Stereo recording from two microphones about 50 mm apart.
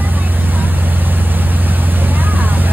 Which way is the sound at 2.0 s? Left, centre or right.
Right.